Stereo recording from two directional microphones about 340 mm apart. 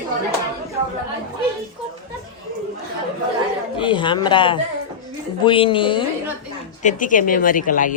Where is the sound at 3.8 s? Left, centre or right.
Centre.